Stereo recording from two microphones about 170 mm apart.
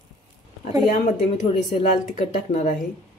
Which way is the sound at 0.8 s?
45° left (ahead or behind).